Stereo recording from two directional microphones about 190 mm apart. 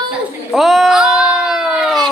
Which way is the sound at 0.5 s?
Centre (ahead or behind).